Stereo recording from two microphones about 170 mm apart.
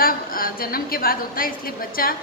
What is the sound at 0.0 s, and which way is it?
A woman's voice, 60° left (ahead or behind).